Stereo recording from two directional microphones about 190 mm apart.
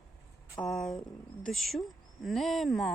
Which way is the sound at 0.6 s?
Centre (ahead or behind).